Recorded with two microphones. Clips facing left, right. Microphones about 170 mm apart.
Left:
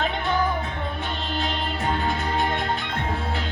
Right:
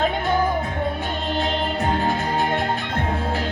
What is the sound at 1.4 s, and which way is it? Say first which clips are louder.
Music: right 5 dB; 40° right (ahead or behind).